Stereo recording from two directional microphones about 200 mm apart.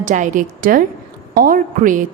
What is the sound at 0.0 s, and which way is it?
A woman's voice, 40° right (ahead or behind).